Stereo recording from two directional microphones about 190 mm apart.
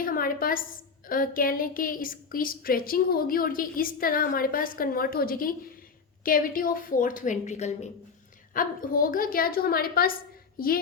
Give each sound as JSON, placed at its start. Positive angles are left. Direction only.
{"t": 0.0, "sound": "a woman's voice", "side_deg": 50}
{"t": 8.5, "sound": "a woman's voice", "side_deg": 45}